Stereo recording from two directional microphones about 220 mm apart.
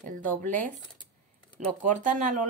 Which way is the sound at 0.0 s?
35° right (ahead or behind).